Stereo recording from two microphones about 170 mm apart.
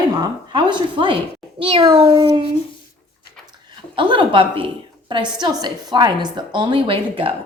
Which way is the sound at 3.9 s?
30° right (ahead or behind).